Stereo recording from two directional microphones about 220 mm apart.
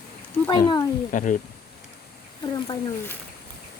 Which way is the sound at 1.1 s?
35° left (ahead or behind).